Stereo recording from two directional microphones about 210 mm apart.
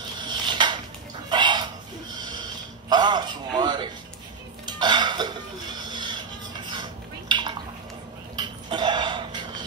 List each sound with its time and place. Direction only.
0.2 s a sound: 20° right (ahead or behind)
2.9 s a man's voice: 20° right (ahead or behind)
4.7 s cough: 20° right (ahead or behind)
6.7 s dishes: 20° right (ahead or behind)
8.4 s cough: 20° right (ahead or behind)